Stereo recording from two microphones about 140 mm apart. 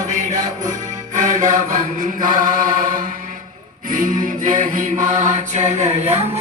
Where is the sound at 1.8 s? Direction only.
75° right (ahead or behind); by 6.2 s 50° right (ahead or behind).